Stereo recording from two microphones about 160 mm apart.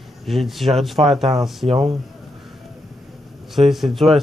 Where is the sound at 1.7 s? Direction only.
40° right (ahead or behind).